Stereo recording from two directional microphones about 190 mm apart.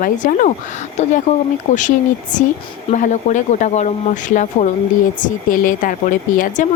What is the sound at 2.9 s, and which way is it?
Speech, 40° left (ahead or behind).